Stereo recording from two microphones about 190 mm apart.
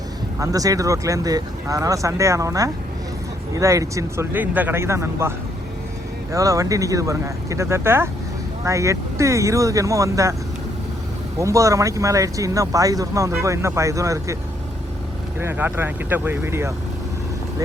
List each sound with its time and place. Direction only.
0.3 s speech: 20° right (ahead or behind)
6.3 s speech: 15° right (ahead or behind)
11.3 s speech: 15° right (ahead or behind)
15.4 s speech: 10° right (ahead or behind)